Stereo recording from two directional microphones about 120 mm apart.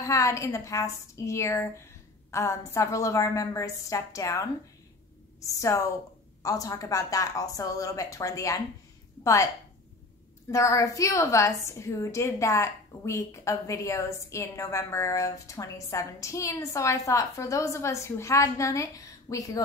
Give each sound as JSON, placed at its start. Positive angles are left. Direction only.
{"t": 0.0, "sound": "a woman's voice", "side_deg": 25}
{"t": 10.5, "sound": "a woman's voice", "side_deg": 25}